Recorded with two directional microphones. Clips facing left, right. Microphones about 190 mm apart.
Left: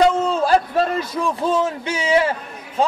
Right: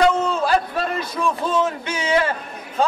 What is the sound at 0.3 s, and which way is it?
A man's voice, 35° left (ahead or behind).